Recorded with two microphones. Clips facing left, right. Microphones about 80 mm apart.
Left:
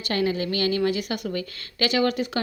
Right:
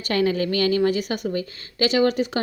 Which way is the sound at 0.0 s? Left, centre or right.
Right.